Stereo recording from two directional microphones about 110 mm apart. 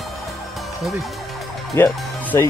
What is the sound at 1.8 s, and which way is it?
Speech, 20° left (ahead or behind).